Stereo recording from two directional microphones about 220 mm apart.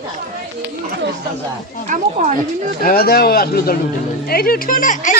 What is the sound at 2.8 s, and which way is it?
A woman's voice, 40° left (ahead or behind).